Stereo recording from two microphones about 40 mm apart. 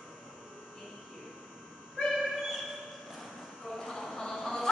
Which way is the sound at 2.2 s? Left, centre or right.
Centre.